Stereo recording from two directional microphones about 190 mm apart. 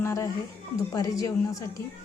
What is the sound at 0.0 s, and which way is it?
A woman's voice, 15° left (ahead or behind).